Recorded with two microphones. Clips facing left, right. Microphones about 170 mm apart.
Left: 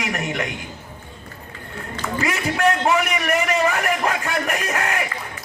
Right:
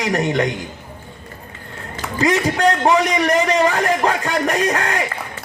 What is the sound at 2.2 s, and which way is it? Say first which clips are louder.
A man's voice: right 5 dB; 35° right (ahead or behind).